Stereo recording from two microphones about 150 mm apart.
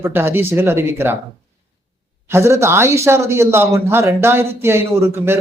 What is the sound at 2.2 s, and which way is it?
Speech, 15° right (ahead or behind).